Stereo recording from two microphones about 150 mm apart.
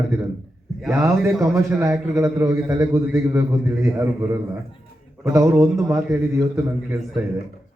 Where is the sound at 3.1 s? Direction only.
15° right (ahead or behind).